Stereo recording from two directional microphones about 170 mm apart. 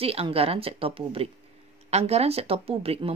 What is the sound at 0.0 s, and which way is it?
Speech, 35° right (ahead or behind).